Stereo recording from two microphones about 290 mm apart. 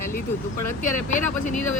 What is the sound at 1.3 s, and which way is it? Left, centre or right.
Speech, left.